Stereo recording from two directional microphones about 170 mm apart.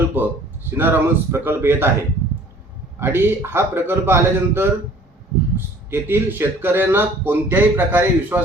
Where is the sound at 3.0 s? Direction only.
15° right (ahead or behind).